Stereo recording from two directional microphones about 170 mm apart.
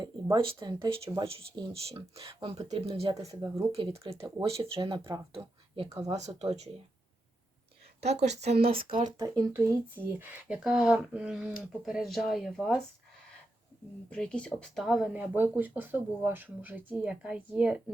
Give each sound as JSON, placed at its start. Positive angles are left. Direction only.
{"t": 0.0, "sound": "speech", "side_deg": -25}
{"t": 3.2, "sound": "speech", "side_deg": -20}
{"t": 3.7, "sound": "speech", "side_deg": -35}
{"t": 8.2, "sound": "speech", "side_deg": -40}
{"t": 9.1, "sound": "speech", "side_deg": -20}
{"t": 14.1, "sound": "speech", "side_deg": 5}